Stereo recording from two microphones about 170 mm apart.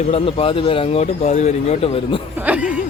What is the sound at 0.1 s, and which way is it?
Speech, 35° left (ahead or behind).